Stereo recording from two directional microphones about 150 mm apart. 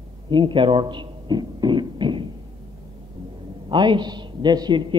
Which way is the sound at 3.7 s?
30° right (ahead or behind).